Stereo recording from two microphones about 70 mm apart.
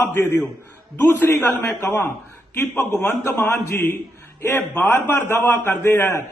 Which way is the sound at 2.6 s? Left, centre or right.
Left.